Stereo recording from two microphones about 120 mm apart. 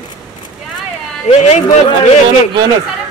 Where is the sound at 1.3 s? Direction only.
70° left (ahead or behind).